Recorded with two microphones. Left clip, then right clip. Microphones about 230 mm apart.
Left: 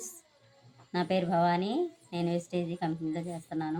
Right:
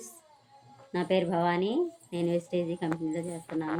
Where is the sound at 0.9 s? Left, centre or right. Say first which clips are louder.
Right 1 dB; left.